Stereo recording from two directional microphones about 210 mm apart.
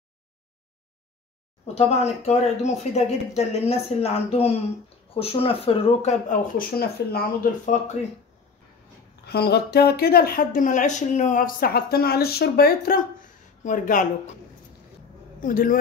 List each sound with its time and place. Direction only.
1.8 s speech: 30° left (ahead or behind)
9.2 s speech: 50° left (ahead or behind)
15.4 s speech: 40° left (ahead or behind)